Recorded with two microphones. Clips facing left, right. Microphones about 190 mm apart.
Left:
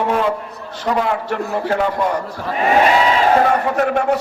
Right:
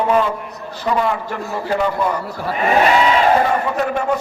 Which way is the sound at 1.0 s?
75° left (ahead or behind).